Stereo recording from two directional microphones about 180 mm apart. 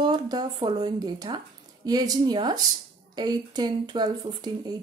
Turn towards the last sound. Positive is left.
turn(degrees=-25)  # may be behind; listen again after turning